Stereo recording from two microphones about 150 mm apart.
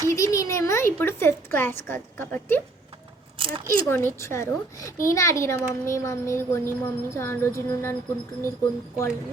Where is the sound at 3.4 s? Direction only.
35° right (ahead or behind).